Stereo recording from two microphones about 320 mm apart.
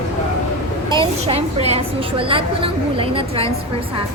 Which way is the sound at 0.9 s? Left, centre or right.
Centre.